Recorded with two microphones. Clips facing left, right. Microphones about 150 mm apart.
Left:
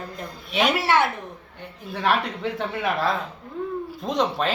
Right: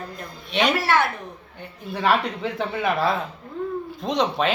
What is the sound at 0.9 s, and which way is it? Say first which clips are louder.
Speech: left 1 dB; 20° left (ahead or behind).